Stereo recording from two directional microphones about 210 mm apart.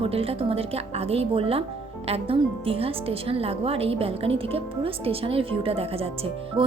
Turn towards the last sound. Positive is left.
turn(degrees=-30)  # may be behind; listen again after turning